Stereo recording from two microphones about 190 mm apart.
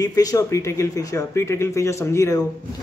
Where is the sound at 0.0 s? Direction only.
20° left (ahead or behind).